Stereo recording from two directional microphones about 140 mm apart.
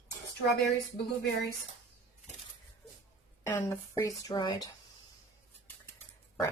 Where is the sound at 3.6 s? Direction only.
20° left (ahead or behind).